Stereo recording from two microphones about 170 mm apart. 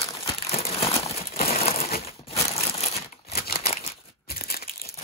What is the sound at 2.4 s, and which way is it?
Crumpling, 15° left (ahead or behind).